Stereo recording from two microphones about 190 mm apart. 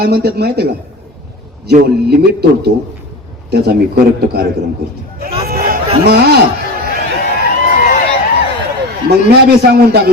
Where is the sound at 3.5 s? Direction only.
60° right (ahead or behind).